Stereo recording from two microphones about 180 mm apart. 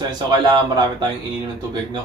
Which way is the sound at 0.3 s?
25° right (ahead or behind).